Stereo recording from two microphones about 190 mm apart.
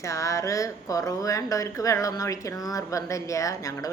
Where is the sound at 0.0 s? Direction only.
15° left (ahead or behind).